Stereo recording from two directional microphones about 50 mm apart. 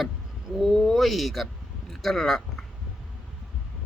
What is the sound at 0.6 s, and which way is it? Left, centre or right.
Speech, centre.